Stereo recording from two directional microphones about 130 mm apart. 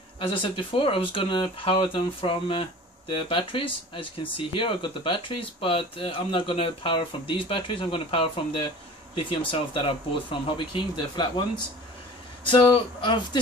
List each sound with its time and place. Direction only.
0.2 s speech: 40° left (ahead or behind)